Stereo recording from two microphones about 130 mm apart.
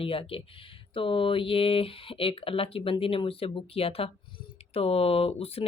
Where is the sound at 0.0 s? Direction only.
45° left (ahead or behind).